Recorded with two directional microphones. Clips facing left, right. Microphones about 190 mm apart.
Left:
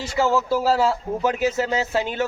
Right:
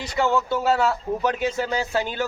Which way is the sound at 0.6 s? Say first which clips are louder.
Even; 30° left (ahead or behind).